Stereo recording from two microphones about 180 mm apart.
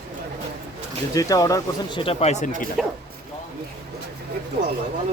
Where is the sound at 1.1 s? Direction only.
20° left (ahead or behind); by 2.5 s 40° left (ahead or behind).